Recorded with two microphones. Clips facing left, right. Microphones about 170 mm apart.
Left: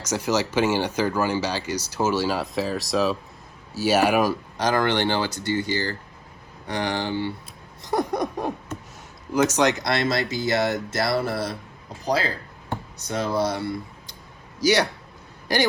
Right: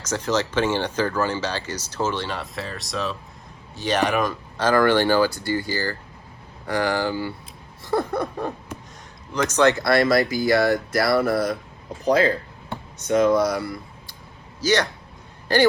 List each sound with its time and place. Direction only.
0.1 s speech: 10° left (ahead or behind)
7.9 s a sound: 15° left (ahead or behind)
9.3 s speech: 10° left (ahead or behind)
12.0 s speech: 35° left (ahead or behind)
14.6 s a man's voice: 10° left (ahead or behind)